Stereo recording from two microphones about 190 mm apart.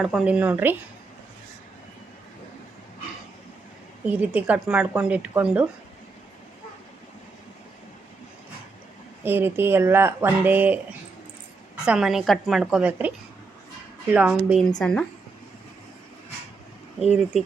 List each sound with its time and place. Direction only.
0.0 s speech: 5° right (ahead or behind)
4.0 s speech: 10° right (ahead or behind)
9.2 s speech: 10° right (ahead or behind)
11.9 s a woman's voice: centre (ahead or behind)
14.8 s a woman's voice: 5° left (ahead or behind)